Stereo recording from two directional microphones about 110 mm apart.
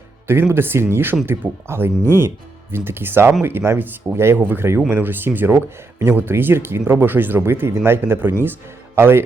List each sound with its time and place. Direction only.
0.3 s speech: 20° right (ahead or behind)